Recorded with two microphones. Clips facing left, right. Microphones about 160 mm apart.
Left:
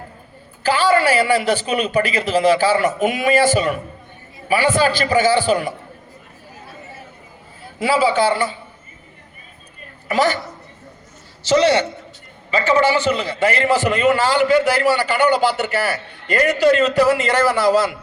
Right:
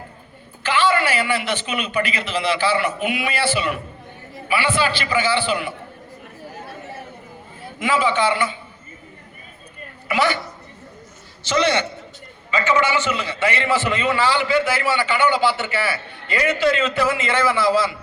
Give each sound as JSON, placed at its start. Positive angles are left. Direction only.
{"t": 0.6, "sound": "a man's voice", "side_deg": 40}
{"t": 7.8, "sound": "a man's voice", "side_deg": 35}
{"t": 10.1, "sound": "a man's voice", "side_deg": 40}
{"t": 11.4, "sound": "a man's voice", "side_deg": 35}